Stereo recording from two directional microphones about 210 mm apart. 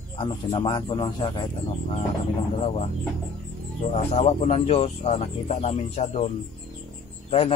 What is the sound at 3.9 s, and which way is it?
Speech, 30° left (ahead or behind).